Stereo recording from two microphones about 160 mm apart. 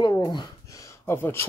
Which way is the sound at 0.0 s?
30° left (ahead or behind).